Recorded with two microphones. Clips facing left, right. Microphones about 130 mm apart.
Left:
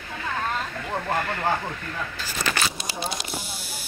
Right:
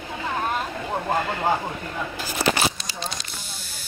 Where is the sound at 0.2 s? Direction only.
20° right (ahead or behind).